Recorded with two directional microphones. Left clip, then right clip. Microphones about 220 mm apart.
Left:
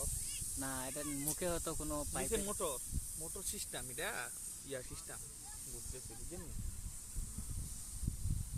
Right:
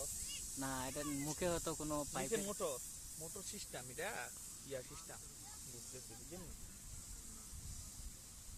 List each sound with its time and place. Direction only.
0.6 s speech: centre (ahead or behind)
2.3 s speech: 50° left (ahead or behind)